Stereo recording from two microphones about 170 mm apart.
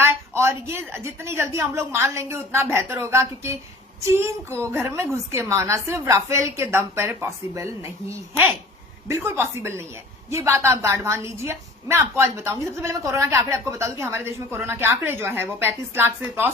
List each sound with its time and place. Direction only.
0.0 s a woman's voice: 15° right (ahead or behind)
9.0 s a woman's voice: 15° right (ahead or behind)